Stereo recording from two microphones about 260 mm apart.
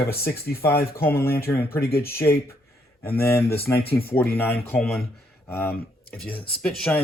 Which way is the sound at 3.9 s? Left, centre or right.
Left.